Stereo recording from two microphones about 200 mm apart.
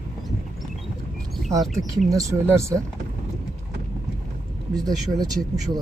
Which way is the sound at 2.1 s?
15° right (ahead or behind).